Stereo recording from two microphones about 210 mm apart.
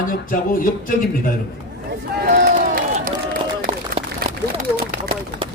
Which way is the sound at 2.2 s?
40° right (ahead or behind).